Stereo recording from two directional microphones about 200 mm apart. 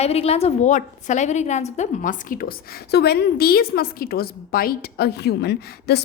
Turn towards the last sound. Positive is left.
turn(degrees=55)  # may be behind; listen again after turning